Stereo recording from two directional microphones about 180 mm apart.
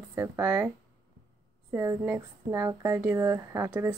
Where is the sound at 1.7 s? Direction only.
15° right (ahead or behind).